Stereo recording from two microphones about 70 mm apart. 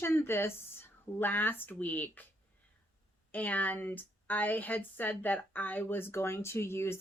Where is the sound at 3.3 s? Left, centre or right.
Left.